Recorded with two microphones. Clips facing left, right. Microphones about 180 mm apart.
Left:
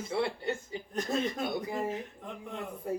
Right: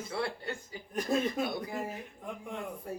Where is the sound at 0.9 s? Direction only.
10° right (ahead or behind).